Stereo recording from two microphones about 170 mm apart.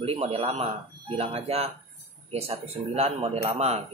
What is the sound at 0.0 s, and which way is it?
Speech, 35° right (ahead or behind).